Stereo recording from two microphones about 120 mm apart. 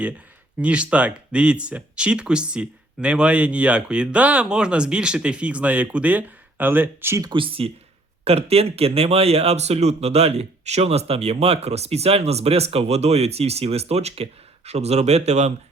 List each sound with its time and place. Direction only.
0.6 s speech: 10° right (ahead or behind)
7.3 s speech: 45° right (ahead or behind); by 15.5 s 65° right (ahead or behind)